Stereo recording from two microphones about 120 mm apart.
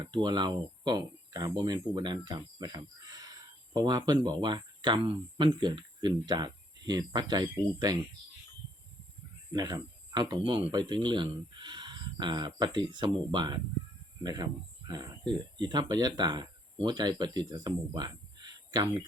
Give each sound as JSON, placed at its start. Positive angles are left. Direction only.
{"t": 0.0, "sound": "speech", "side_deg": -35}
{"t": 9.5, "sound": "speech", "side_deg": -30}